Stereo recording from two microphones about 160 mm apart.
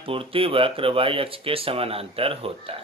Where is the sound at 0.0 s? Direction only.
35° right (ahead or behind).